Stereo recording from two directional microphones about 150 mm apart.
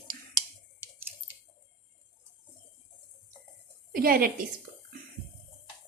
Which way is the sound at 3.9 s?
75° right (ahead or behind).